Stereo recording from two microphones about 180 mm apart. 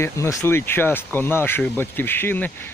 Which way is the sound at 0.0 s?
15° left (ahead or behind).